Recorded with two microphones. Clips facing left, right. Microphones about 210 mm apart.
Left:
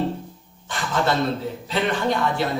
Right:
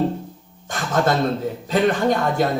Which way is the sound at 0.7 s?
45° right (ahead or behind).